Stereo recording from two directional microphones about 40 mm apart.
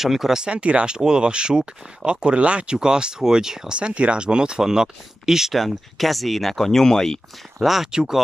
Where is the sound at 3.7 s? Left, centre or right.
Right; by 5.5 s centre.